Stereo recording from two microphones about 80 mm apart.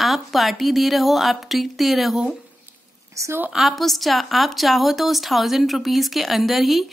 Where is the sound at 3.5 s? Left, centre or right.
Centre.